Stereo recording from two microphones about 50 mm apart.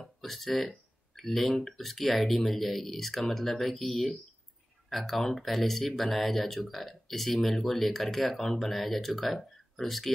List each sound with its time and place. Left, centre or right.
0.0 s speech: centre